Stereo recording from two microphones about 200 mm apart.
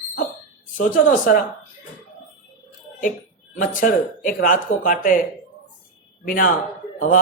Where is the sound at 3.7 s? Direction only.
40° left (ahead or behind).